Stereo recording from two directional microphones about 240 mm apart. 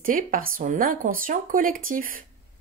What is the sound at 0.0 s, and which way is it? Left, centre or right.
Speech, right.